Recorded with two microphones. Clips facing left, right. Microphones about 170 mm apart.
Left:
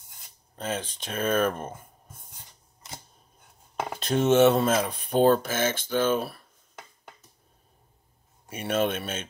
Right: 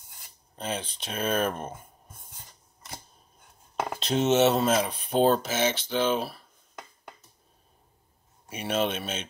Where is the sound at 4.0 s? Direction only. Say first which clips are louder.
Left 3 dB; 50° left (ahead or behind).